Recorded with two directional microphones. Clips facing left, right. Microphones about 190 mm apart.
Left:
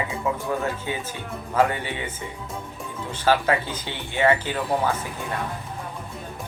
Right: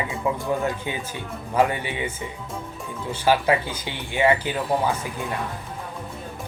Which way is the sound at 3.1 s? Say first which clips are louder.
Right 1 dB; 10° right (ahead or behind).